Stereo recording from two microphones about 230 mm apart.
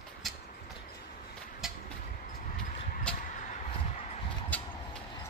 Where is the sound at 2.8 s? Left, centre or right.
Left.